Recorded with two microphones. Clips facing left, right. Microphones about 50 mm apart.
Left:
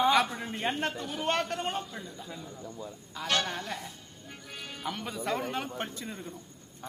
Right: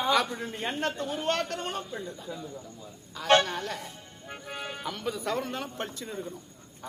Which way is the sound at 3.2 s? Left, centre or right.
Centre.